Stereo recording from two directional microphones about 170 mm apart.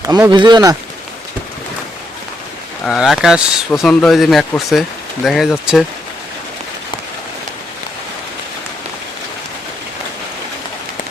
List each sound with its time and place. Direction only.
0.1 s speech: 25° right (ahead or behind)
2.8 s speech: centre (ahead or behind)